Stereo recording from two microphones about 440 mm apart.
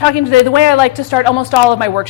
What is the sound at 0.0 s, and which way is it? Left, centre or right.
A man's voice, left.